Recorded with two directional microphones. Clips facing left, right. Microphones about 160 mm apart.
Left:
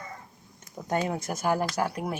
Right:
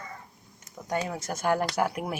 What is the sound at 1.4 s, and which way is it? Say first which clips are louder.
Speech: right 2 dB; 5° left (ahead or behind).